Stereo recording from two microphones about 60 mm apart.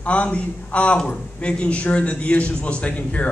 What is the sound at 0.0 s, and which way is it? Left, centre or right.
A man's voice, left.